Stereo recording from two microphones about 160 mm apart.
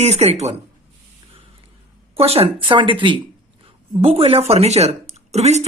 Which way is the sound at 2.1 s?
40° right (ahead or behind).